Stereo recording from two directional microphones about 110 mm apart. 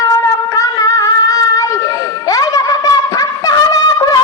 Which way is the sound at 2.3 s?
35° left (ahead or behind).